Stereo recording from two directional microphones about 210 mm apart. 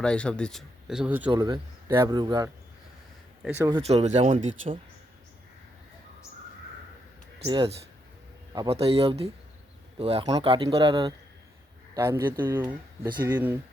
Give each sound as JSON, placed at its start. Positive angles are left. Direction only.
{"t": 0.0, "sound": "speech", "side_deg": 5}
{"t": 1.3, "sound": "speech", "side_deg": -20}
{"t": 7.4, "sound": "speech", "side_deg": -20}